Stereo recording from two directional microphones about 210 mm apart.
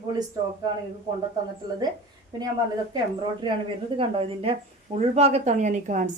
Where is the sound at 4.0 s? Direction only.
25° right (ahead or behind).